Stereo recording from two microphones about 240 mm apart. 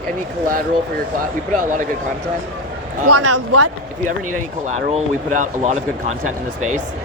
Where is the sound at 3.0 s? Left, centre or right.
Right.